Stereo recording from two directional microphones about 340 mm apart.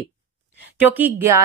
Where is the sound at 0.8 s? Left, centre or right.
Centre.